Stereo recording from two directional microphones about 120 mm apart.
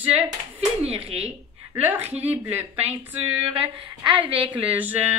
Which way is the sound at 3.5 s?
45° right (ahead or behind).